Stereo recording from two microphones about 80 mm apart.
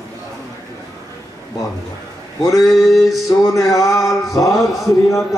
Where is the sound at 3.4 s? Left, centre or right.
Left.